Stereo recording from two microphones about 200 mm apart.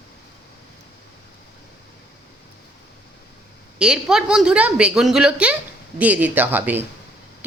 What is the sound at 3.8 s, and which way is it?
A woman's voice, 5° right (ahead or behind).